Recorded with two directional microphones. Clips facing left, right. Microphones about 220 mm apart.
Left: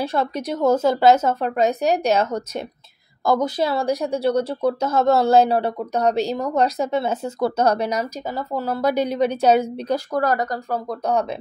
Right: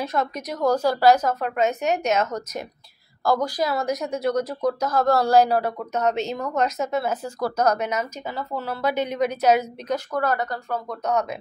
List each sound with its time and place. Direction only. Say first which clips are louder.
0.0 s speech: left 3 dB; 30° left (ahead or behind)